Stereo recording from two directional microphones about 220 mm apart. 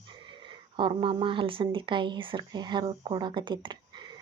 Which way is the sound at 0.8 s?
20° right (ahead or behind).